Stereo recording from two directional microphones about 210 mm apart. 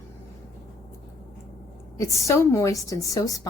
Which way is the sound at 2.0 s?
15° left (ahead or behind).